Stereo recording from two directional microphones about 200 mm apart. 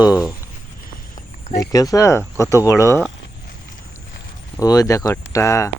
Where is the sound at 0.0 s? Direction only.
20° left (ahead or behind).